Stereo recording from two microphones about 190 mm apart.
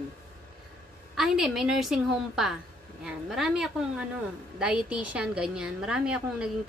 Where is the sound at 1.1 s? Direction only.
Centre (ahead or behind).